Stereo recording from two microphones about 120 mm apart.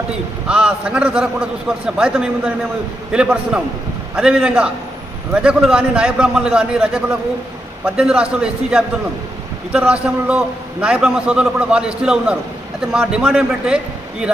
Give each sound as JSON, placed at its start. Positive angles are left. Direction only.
{"t": 0.4, "sound": "a man's voice", "side_deg": -10}